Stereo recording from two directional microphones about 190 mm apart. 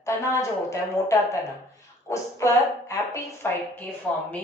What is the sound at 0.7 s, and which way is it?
A woman's voice, 15° left (ahead or behind).